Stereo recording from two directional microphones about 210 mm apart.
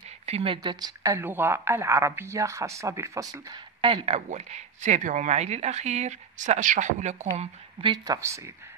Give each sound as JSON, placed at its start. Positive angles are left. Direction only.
{"t": 0.3, "sound": "a woman's voice", "side_deg": -25}
{"t": 3.8, "sound": "speech", "side_deg": -25}